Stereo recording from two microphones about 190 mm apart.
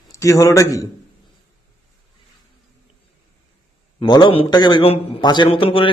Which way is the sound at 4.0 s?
25° left (ahead or behind).